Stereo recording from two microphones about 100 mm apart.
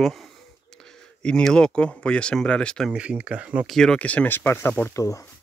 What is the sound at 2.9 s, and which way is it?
Speech, 10° right (ahead or behind).